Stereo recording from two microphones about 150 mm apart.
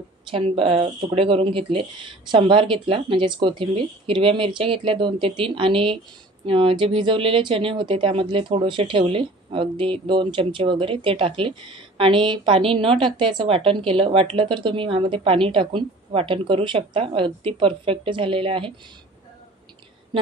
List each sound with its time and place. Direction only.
0.3 s speech: 40° right (ahead or behind)